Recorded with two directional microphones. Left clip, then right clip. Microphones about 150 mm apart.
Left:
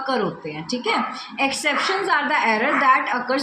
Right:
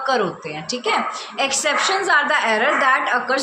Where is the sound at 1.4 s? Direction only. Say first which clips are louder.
Right 2 dB; 5° right (ahead or behind).